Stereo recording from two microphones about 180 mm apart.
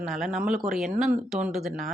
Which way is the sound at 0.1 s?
Centre (ahead or behind).